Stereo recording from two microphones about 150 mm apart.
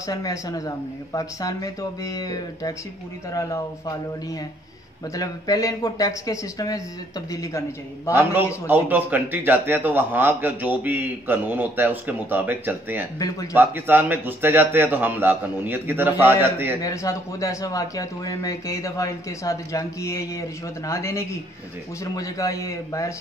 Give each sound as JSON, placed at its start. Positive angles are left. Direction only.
{"t": 0.0, "sound": "speech", "side_deg": 25}
{"t": 8.1, "sound": "a man's voice", "side_deg": -10}
{"t": 13.2, "sound": "speech", "side_deg": 25}
{"t": 13.6, "sound": "a man's voice", "side_deg": -15}
{"t": 16.8, "sound": "speech", "side_deg": 20}